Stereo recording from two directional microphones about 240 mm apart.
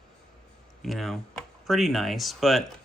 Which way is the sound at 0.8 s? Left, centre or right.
Centre.